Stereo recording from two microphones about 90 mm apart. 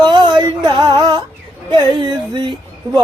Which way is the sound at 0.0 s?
60° right (ahead or behind).